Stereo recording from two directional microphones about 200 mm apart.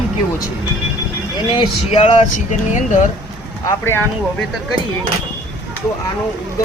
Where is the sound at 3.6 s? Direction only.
15° left (ahead or behind).